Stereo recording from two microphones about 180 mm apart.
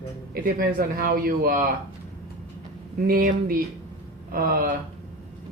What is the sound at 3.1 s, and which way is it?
Speech, 50° right (ahead or behind).